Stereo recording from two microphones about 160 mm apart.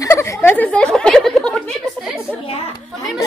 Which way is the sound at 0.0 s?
20° left (ahead or behind).